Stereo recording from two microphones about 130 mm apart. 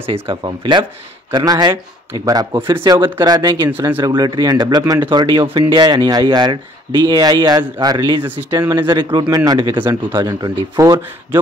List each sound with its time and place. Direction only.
0.1 s speech: 40° right (ahead or behind)
8.2 s speech: 15° right (ahead or behind)
8.5 s speech: 35° right (ahead or behind)